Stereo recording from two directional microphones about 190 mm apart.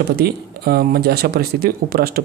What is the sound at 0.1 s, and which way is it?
Speech, 55° right (ahead or behind).